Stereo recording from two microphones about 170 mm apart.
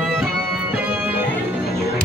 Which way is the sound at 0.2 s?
10° right (ahead or behind).